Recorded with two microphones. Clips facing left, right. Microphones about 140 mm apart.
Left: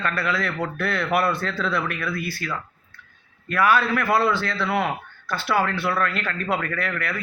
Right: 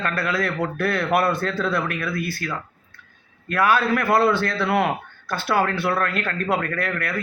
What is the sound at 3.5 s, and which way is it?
A man's voice, 45° right (ahead or behind).